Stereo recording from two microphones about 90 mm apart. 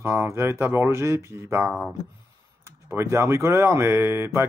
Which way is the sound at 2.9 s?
30° right (ahead or behind).